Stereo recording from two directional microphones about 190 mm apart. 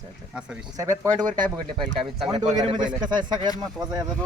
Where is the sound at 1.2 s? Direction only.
45° right (ahead or behind).